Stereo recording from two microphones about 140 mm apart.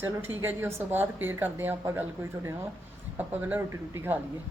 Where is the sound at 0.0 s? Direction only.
15° right (ahead or behind).